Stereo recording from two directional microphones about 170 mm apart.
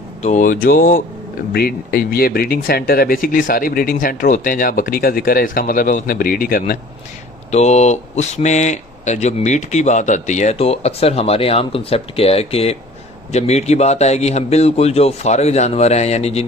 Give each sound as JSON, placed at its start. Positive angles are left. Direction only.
{"t": 0.2, "sound": "speech", "side_deg": 45}
{"t": 7.5, "sound": "speech", "side_deg": 40}